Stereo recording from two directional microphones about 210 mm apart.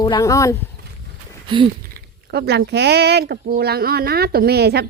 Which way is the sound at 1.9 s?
45° right (ahead or behind).